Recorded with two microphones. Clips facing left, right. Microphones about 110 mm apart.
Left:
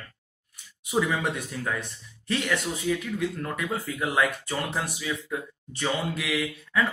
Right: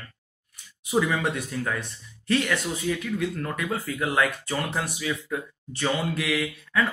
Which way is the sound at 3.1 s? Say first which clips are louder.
Right 1 dB; 20° left (ahead or behind).